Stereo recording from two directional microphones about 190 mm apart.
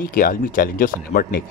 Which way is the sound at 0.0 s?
45° left (ahead or behind).